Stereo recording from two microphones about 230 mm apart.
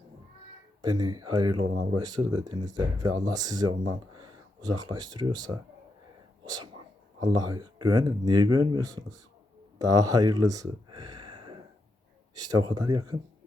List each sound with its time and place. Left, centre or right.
0.8 s speech: centre